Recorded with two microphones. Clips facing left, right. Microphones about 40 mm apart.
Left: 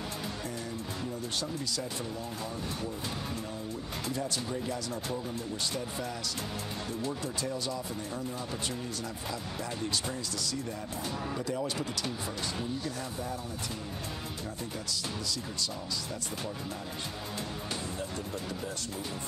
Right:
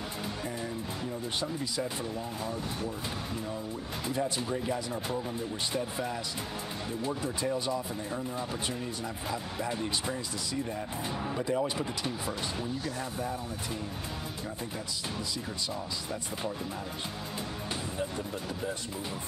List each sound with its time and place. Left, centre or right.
1.2 s speech: right
4.0 s speech: right
15.3 s speech: right
17.9 s speech: right